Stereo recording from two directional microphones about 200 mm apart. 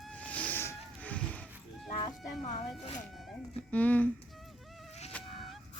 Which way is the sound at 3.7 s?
5° left (ahead or behind).